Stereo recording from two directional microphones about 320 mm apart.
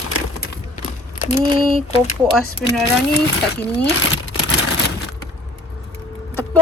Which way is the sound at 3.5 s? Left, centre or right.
Left.